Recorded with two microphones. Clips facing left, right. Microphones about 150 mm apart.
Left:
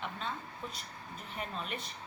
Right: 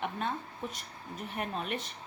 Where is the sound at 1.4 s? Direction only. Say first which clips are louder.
Right 5 dB; 60° right (ahead or behind).